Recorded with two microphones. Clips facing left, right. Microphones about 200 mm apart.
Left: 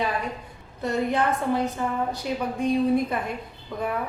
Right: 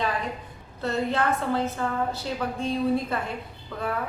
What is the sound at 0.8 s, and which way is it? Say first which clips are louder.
A woman's voice: left 2 dB; 15° left (ahead or behind).